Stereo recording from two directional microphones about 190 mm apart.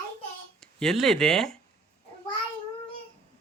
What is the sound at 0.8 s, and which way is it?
Speech, centre (ahead or behind).